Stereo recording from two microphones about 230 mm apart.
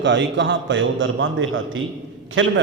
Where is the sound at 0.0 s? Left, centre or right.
Right.